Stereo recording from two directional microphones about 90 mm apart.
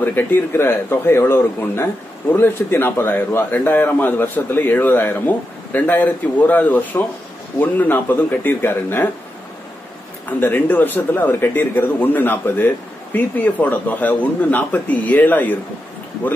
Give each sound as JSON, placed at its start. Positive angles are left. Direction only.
{"t": 0.0, "sound": "a man's voice", "side_deg": 20}
{"t": 10.4, "sound": "a man's voice", "side_deg": 20}